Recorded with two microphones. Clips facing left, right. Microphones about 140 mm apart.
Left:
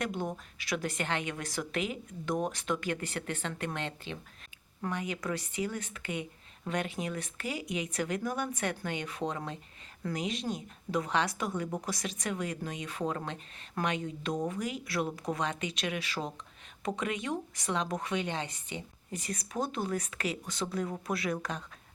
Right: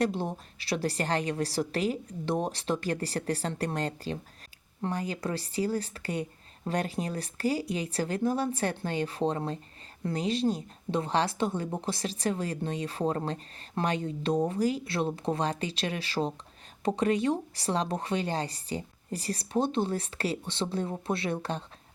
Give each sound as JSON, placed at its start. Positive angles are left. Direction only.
{"t": 0.0, "sound": "a woman's voice", "side_deg": -30}